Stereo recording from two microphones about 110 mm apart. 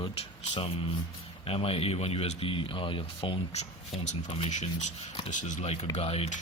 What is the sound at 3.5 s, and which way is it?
Speech, 85° left.